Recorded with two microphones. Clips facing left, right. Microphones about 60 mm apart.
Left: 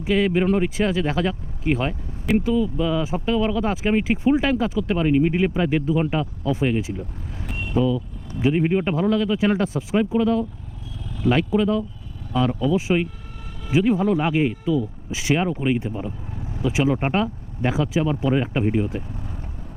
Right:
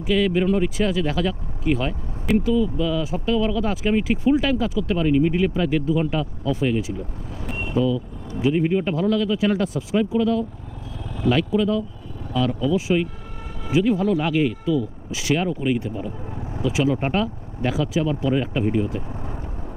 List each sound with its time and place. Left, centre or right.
0.0 s speech: left
7.5 s vehicle: right
7.8 s speech: centre
16.3 s vehicle: right
16.6 s speech: left